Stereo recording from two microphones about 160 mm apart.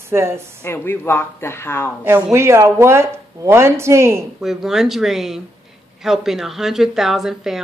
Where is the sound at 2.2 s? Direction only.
15° right (ahead or behind).